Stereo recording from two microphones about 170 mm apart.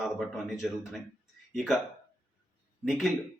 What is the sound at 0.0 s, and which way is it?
Speech, centre (ahead or behind).